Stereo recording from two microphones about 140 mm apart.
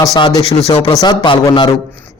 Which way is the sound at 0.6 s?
40° left (ahead or behind).